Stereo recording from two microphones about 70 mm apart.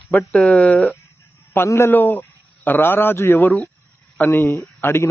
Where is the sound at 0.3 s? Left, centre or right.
Centre.